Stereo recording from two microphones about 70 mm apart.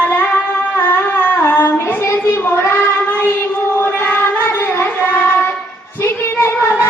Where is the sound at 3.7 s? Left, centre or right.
Left.